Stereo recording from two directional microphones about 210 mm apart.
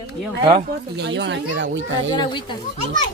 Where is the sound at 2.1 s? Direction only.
20° left (ahead or behind).